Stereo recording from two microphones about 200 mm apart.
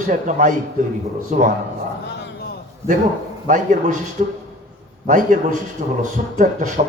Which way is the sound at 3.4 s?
40° right (ahead or behind).